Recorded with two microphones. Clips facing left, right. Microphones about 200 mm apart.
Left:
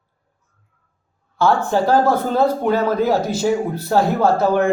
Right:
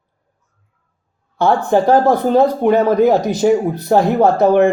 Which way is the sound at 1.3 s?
20° right (ahead or behind).